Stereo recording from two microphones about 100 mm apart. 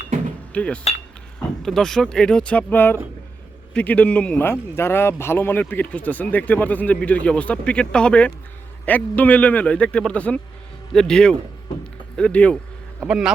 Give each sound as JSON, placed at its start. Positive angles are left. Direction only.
{"t": 0.5, "sound": "speech", "side_deg": 10}
{"t": 13.0, "sound": "speech", "side_deg": -10}